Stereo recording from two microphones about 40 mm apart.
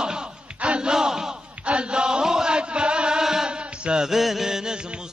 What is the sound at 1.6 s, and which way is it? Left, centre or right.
Chant, right.